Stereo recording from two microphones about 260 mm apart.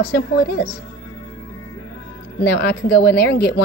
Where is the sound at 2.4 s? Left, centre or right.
Left.